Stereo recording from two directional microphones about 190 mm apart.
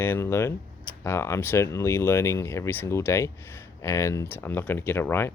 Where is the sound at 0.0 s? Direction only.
10° left (ahead or behind).